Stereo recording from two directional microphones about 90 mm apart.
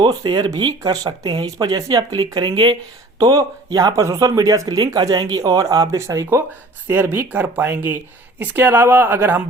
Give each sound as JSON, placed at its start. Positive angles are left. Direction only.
{"t": 0.0, "sound": "speech", "side_deg": -50}
{"t": 2.5, "sound": "speech", "side_deg": -65}
{"t": 3.2, "sound": "speech", "side_deg": -45}
{"t": 6.8, "sound": "speech", "side_deg": -25}